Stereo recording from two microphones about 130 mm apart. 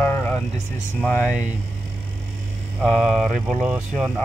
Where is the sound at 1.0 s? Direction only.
15° left (ahead or behind).